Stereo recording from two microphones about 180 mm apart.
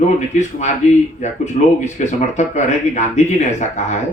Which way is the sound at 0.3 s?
40° left (ahead or behind).